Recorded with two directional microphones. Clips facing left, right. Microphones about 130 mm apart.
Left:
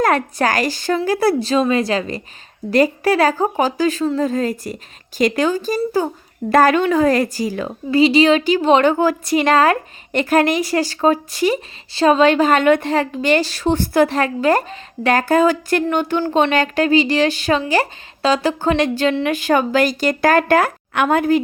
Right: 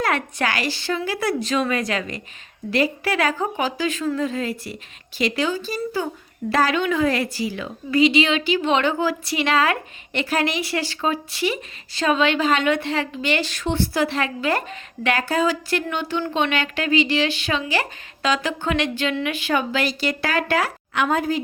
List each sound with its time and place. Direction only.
0.0 s a woman's voice: 40° left (ahead or behind)
4.3 s a woman's voice: 40° left (ahead or behind); by 21.4 s 60° left (ahead or behind)